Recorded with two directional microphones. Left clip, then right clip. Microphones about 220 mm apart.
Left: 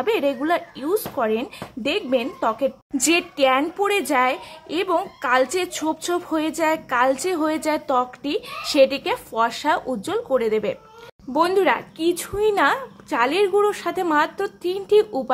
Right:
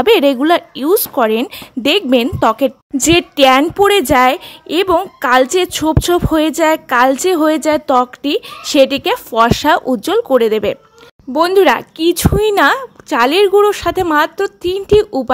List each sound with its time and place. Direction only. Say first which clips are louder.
0.0 s a woman's voice: right 11 dB; 45° right (ahead or behind)